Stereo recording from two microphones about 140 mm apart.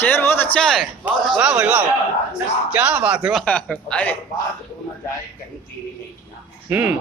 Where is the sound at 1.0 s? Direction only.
10° right (ahead or behind).